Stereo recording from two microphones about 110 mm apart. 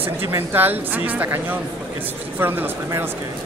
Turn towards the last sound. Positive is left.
turn(degrees=-20)  # may be behind; listen again after turning